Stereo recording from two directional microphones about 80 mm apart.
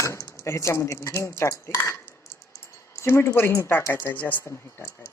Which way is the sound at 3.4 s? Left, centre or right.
Left.